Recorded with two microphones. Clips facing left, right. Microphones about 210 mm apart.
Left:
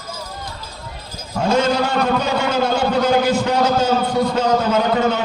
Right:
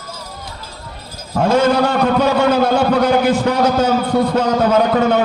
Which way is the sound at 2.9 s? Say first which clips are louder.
Right 2 dB; 60° right (ahead or behind).